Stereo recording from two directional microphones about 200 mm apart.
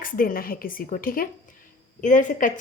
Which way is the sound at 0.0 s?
45° left (ahead or behind).